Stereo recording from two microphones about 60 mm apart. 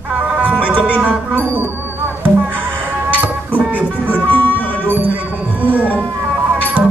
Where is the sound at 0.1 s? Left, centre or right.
Right.